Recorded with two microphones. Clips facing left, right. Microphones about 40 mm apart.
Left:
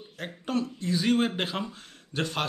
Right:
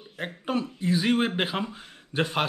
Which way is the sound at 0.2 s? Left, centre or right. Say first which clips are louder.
Right 1 dB; centre.